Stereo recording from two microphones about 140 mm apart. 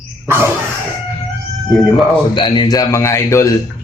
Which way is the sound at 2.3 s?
35° left (ahead or behind).